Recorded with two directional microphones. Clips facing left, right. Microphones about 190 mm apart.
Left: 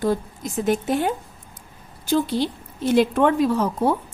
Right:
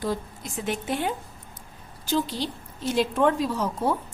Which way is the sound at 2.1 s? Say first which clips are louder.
Left 6 dB; 55° left (ahead or behind).